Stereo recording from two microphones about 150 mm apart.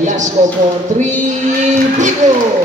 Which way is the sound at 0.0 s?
55° right (ahead or behind).